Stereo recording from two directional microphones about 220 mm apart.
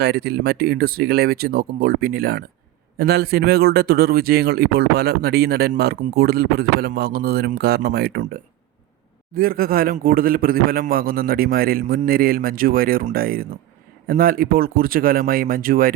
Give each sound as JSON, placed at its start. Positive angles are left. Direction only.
{"t": 0.0, "sound": "a man's voice", "side_deg": -45}